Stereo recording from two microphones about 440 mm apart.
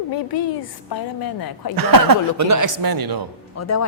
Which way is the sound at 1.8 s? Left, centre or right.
Right.